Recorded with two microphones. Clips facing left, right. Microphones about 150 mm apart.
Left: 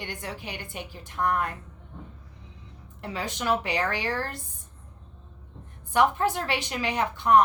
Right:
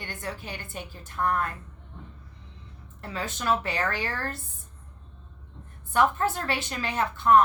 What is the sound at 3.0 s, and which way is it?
A woman's voice, 15° left (ahead or behind).